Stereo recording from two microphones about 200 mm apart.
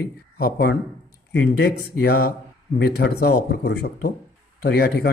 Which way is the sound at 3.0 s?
50° left (ahead or behind).